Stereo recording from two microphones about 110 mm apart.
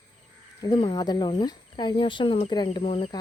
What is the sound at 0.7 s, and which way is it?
Speech, 45° left (ahead or behind).